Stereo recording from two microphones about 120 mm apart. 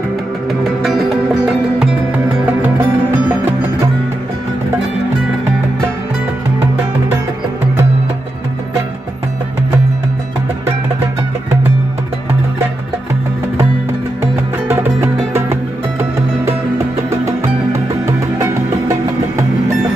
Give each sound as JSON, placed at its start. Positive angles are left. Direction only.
{"t": 0.5, "sound": "music", "side_deg": 0}
{"t": 14.2, "sound": "music", "side_deg": -20}
{"t": 17.7, "sound": "music", "side_deg": -25}